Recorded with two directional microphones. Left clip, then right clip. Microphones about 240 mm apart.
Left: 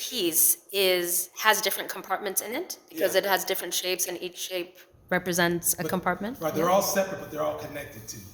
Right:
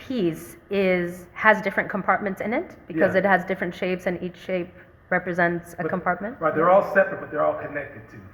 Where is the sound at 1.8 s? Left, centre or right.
Left.